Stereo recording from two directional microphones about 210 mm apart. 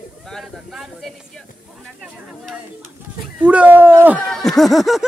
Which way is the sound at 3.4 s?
5° right (ahead or behind).